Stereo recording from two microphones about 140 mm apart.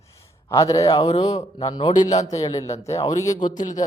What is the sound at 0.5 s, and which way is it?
A man's voice, 25° left (ahead or behind).